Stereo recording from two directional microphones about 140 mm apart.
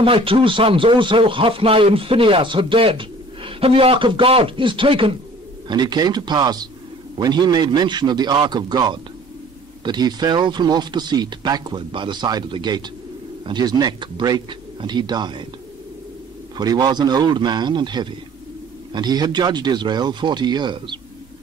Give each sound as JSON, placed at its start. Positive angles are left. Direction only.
{"t": 0.0, "sound": "speech", "side_deg": -40}
{"t": 16.5, "sound": "speech", "side_deg": -30}